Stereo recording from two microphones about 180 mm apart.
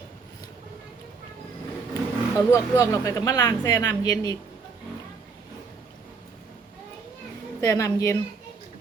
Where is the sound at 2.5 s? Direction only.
20° left (ahead or behind).